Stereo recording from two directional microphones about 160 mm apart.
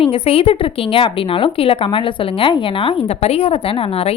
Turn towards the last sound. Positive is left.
turn(degrees=35)  # may be behind; listen again after turning